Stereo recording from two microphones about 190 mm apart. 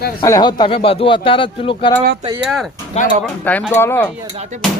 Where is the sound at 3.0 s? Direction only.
35° left (ahead or behind).